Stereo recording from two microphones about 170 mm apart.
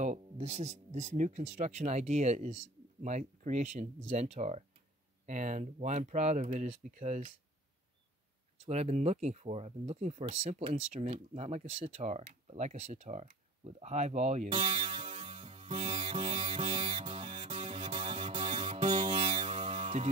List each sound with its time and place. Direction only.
0.0 s speech: 45° right (ahead or behind)
8.6 s speech: 40° right (ahead or behind)
14.5 s music: 30° right (ahead or behind)